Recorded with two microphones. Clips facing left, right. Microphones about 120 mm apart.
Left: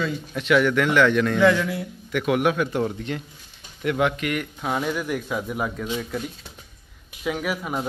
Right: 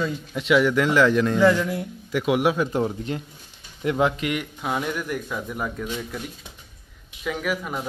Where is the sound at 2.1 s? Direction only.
20° right (ahead or behind).